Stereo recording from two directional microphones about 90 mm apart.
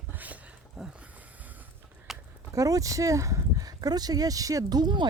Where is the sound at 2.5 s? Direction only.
40° right (ahead or behind).